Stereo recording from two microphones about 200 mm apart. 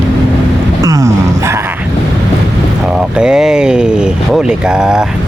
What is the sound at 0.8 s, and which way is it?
Dog, 15° right (ahead or behind).